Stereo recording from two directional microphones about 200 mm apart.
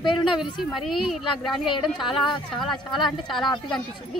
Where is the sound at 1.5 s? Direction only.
25° left (ahead or behind).